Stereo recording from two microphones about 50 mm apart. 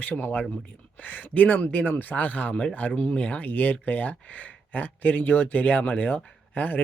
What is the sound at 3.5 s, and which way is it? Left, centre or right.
Speech, left.